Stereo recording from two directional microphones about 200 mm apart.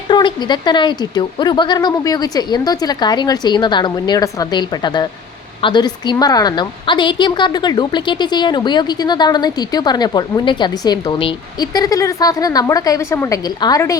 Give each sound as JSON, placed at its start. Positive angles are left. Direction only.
{"t": 0.1, "sound": "a woman's voice", "side_deg": 20}